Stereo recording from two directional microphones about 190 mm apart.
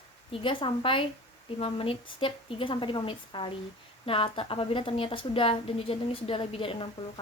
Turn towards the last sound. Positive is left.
turn(degrees=30)  # may be behind; listen again after turning